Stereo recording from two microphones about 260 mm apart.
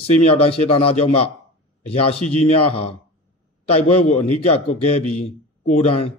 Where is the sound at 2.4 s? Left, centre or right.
Left.